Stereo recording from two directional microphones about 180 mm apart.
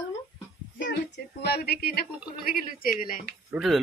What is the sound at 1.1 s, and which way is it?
Speech, 65° left (ahead or behind).